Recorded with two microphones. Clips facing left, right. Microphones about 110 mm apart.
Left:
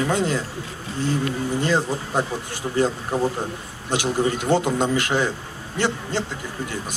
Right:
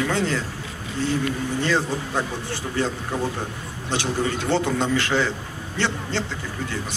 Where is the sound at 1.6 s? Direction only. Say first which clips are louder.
Even; 15° left (ahead or behind).